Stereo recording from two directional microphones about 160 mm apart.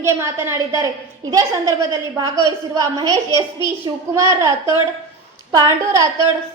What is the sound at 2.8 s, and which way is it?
A woman's voice, 25° right (ahead or behind).